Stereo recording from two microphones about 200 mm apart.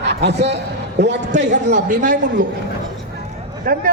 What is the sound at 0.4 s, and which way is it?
A man's voice, 60° right (ahead or behind).